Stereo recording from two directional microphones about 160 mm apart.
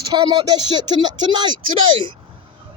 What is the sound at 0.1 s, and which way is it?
Speech, 25° right (ahead or behind).